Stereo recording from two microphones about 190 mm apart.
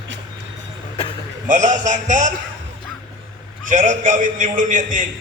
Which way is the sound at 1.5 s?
40° right (ahead or behind).